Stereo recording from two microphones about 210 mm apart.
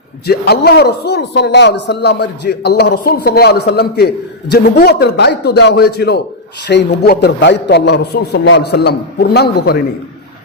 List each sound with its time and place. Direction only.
0.3 s a man's voice: 50° left (ahead or behind)